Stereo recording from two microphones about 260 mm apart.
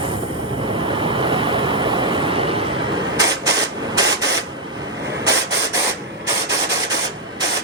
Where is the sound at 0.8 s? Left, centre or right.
Centre.